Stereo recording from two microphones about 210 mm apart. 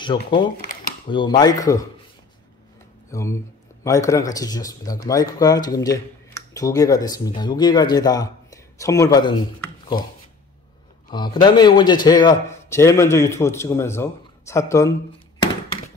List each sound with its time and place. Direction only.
0.0 s speech: 25° left (ahead or behind)
3.1 s speech: 15° left (ahead or behind)
11.1 s speech: 20° left (ahead or behind)